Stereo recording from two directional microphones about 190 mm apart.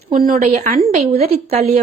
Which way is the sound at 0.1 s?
45° right (ahead or behind).